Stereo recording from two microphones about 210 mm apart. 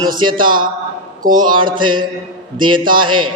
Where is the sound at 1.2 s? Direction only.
40° right (ahead or behind).